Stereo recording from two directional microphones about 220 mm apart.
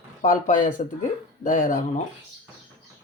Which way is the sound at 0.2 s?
35° left (ahead or behind).